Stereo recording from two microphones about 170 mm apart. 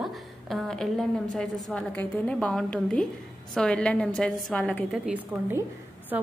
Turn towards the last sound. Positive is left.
turn(degrees=-10)  # may be behind; listen again after turning